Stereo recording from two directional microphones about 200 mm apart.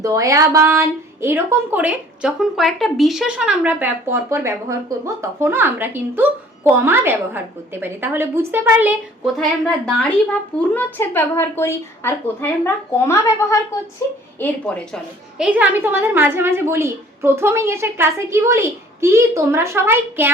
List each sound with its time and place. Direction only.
0.0 s a woman's voice: 15° right (ahead or behind)